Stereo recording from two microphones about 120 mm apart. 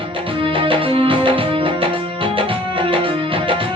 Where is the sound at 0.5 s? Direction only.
45° right (ahead or behind).